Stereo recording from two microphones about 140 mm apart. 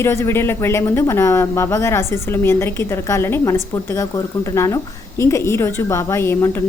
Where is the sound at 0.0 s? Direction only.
20° left (ahead or behind).